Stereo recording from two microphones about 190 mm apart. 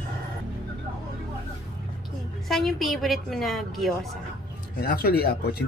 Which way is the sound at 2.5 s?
Centre (ahead or behind).